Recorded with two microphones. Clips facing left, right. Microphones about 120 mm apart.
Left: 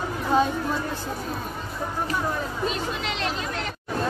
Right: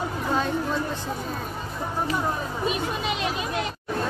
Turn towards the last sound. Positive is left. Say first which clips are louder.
# right 2 dB
turn(degrees=-15)  # may be behind; listen again after turning